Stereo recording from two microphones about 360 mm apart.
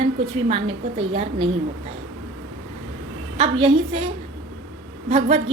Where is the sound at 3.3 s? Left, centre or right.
Centre.